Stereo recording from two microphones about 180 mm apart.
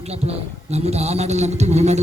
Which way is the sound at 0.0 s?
35° right (ahead or behind).